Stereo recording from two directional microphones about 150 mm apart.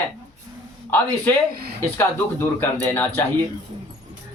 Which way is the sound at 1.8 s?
15° left (ahead or behind).